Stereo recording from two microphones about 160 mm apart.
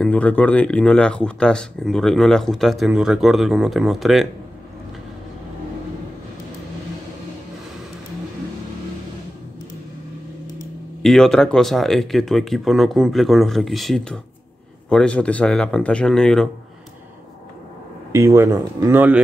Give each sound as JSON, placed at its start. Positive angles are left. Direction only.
{"t": 0.0, "sound": "speech", "side_deg": 10}
{"t": 11.0, "sound": "speech", "side_deg": 0}
{"t": 18.1, "sound": "speech", "side_deg": -15}